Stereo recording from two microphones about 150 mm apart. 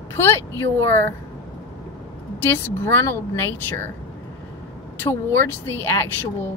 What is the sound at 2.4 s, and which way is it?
Speech, 15° left (ahead or behind).